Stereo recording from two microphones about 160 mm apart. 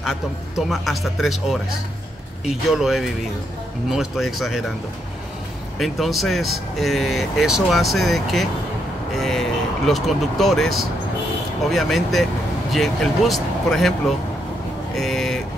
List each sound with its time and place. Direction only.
0.0 s speech: centre (ahead or behind)
5.8 s speech: centre (ahead or behind)
15.0 s vehicle: centre (ahead or behind)